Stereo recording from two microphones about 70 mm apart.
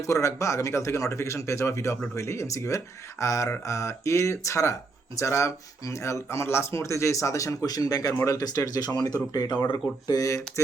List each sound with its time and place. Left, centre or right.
0.0 s speech: left
10.1 s speech: left